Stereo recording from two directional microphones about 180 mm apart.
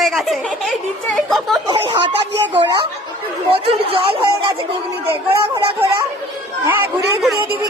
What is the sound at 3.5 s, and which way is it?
Speech, 30° right (ahead or behind).